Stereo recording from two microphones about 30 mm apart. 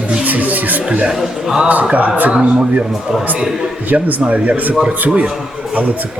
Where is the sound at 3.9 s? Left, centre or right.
Right.